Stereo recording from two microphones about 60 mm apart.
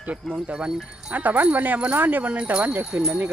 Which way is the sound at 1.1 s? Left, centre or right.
Right.